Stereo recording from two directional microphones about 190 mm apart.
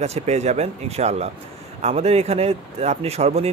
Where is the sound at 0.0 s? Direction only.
35° right (ahead or behind).